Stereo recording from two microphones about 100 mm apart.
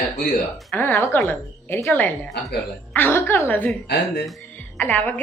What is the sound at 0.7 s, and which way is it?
A woman's voice, 20° left (ahead or behind).